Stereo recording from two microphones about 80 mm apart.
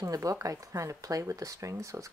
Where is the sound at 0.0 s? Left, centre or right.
Right.